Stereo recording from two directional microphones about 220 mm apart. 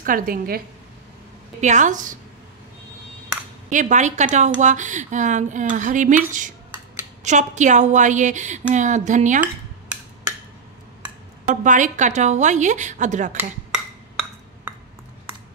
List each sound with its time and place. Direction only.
0.0 s a woman's voice: 40° right (ahead or behind)
1.6 s a woman's voice: 35° right (ahead or behind)
3.7 s a woman's voice: 35° right (ahead or behind)
11.4 s a woman's voice: 35° right (ahead or behind)